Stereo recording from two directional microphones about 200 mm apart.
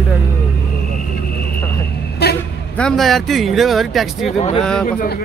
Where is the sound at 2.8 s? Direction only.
Centre (ahead or behind).